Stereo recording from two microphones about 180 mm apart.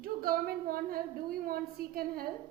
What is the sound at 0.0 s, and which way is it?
A woman's voice, 55° right (ahead or behind).